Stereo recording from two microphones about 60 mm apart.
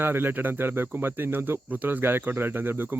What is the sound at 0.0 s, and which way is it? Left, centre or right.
Speech, right.